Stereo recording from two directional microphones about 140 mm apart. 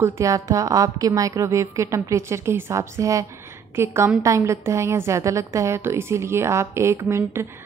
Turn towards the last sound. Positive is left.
turn(degrees=-20)  # may be behind; listen again after turning